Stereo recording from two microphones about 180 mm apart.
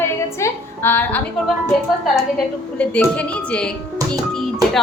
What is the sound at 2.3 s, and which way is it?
A woman's voice, 5° left (ahead or behind).